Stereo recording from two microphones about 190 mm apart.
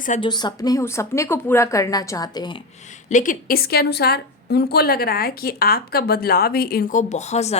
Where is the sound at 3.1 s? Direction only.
45° left (ahead or behind).